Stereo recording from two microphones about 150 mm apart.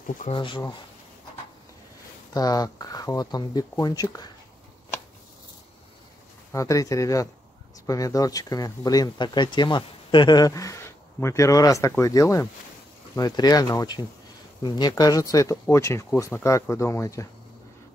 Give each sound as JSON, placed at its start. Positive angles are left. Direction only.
{"t": 0.3, "sound": "speech", "side_deg": 35}
{"t": 2.3, "sound": "speech", "side_deg": 25}
{"t": 6.5, "sound": "speech", "side_deg": 20}